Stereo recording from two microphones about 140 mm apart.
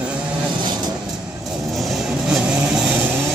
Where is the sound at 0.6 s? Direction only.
30° right (ahead or behind).